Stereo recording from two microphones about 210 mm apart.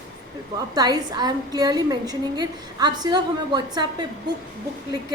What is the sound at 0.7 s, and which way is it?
A woman's voice, 20° right (ahead or behind).